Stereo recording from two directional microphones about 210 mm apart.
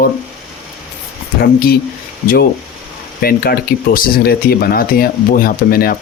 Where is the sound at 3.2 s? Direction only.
45° left (ahead or behind).